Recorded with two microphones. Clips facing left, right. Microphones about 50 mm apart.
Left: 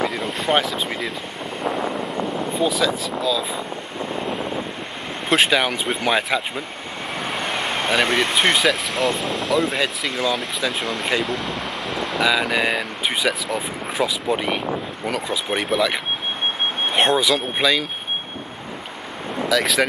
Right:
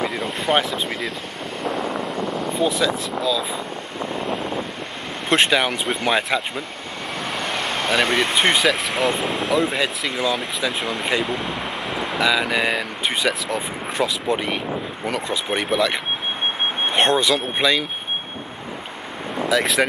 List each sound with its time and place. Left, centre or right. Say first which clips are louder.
0.0 s boat: left 1 dB; centre
1.6 s a sound: left 1 dB; centre
5.3 s speech: even; centre
19.5 s speech: even; centre